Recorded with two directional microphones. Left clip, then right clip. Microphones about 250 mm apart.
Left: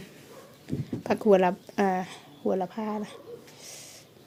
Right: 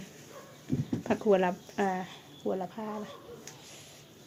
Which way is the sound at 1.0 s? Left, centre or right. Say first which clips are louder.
Left 5 dB; left.